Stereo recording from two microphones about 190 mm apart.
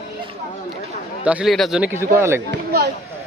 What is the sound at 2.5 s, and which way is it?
Speech, 55° right (ahead or behind).